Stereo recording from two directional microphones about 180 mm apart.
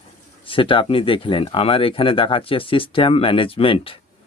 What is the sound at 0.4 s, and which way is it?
Speech, 30° left (ahead or behind).